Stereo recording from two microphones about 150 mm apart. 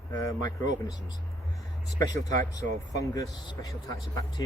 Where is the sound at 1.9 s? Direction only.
25° left (ahead or behind).